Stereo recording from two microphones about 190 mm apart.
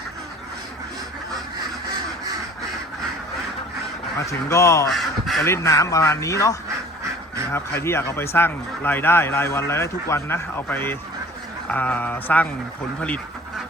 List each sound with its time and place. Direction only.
4.3 s a man's voice: 15° left (ahead or behind)
4.9 s speech: centre (ahead or behind)
5.5 s a man's voice: 15° left (ahead or behind)